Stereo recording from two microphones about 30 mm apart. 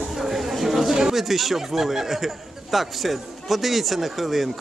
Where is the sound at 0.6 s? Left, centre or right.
Centre.